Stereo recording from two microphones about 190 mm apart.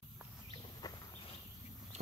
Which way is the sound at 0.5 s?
20° left (ahead or behind).